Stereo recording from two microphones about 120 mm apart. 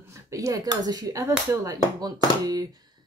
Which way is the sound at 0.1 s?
25° right (ahead or behind).